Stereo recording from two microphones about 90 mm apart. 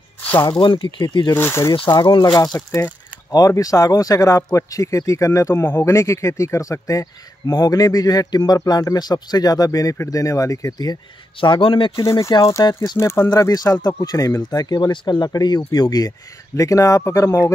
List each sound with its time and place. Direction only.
0.5 s speech: 60° left (ahead or behind)
1.3 s speech: 30° left (ahead or behind)
1.9 s speech: 50° left (ahead or behind)
11.3 s a man's voice: 70° left (ahead or behind)
12.0 s speech: 40° left (ahead or behind)
12.9 s speech: 30° left (ahead or behind); by 16.1 s 50° left (ahead or behind)
16.5 s speech: 35° left (ahead or behind)